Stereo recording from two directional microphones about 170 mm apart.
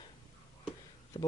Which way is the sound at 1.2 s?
30° left (ahead or behind).